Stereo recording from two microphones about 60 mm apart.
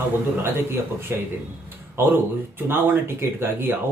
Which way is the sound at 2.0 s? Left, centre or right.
Right.